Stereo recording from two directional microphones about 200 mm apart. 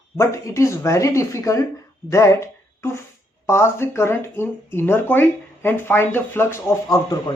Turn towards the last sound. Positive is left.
turn(degrees=15)  # may be behind; listen again after turning